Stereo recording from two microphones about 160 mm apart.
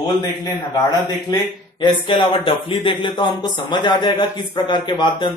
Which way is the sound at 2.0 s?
30° left (ahead or behind).